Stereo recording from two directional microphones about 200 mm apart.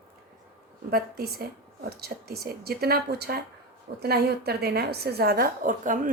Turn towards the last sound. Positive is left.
turn(degrees=-40)  # may be behind; listen again after turning